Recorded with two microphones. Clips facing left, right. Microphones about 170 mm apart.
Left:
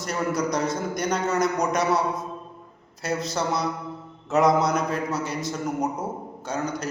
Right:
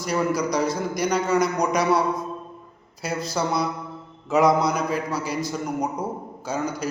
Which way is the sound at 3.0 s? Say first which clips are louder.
Even; centre (ahead or behind).